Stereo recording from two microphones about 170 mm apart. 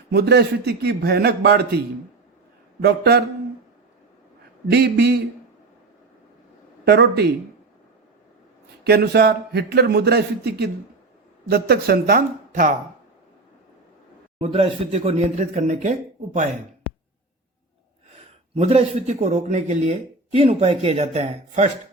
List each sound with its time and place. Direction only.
0.1 s speech: 75° right (ahead or behind)
2.8 s speech: 70° right (ahead or behind)
4.7 s speech: 70° right (ahead or behind)
6.8 s speech: 75° right (ahead or behind)
8.8 s speech: 70° right (ahead or behind); by 12.7 s 50° right (ahead or behind)
14.3 s speech: 35° right (ahead or behind)
18.5 s speech: 35° right (ahead or behind)